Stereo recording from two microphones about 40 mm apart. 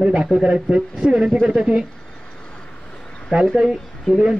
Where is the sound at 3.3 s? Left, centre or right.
Right.